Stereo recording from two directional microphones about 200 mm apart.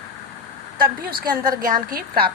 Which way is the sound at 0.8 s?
50° right (ahead or behind).